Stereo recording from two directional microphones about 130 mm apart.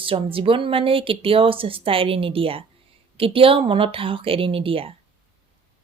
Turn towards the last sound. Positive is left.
turn(degrees=-45)  # may be behind; listen again after turning